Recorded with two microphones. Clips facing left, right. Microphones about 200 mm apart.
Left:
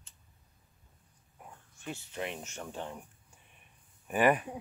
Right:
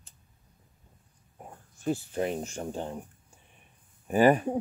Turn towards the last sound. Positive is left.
turn(degrees=-30)  # may be behind; listen again after turning